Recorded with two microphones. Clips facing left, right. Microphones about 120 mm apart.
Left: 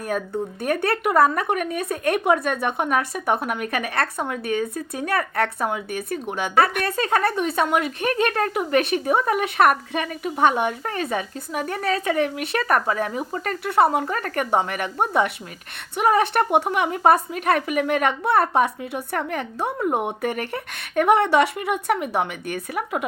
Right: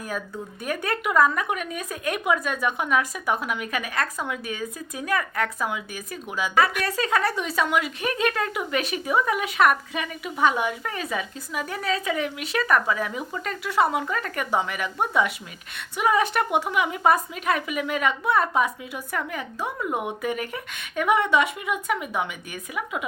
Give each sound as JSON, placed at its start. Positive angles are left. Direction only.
{"t": 0.6, "sound": "speech", "side_deg": 60}
{"t": 1.3, "sound": "speech", "side_deg": 40}
{"t": 13.8, "sound": "speech", "side_deg": 40}
{"t": 16.6, "sound": "speech", "side_deg": 40}
{"t": 19.8, "sound": "speech", "side_deg": 40}